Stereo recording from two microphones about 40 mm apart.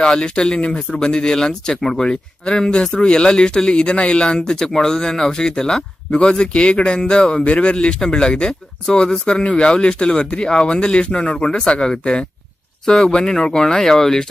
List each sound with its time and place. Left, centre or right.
0.0 s speech: centre